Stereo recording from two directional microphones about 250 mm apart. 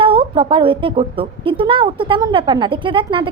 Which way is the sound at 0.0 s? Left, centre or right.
Right.